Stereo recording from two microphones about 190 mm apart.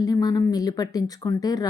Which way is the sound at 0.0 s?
20° left (ahead or behind).